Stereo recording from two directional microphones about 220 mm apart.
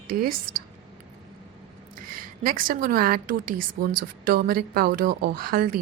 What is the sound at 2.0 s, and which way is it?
A woman's voice, 40° right (ahead or behind).